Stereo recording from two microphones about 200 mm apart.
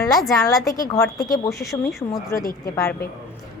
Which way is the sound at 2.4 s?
45° left (ahead or behind).